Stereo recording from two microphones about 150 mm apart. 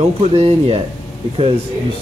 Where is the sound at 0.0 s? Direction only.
40° right (ahead or behind).